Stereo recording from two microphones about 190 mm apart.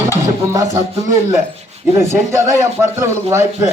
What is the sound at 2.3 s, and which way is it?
Speech, 15° right (ahead or behind).